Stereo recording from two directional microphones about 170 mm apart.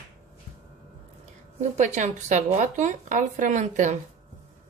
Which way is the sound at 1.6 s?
45° right (ahead or behind).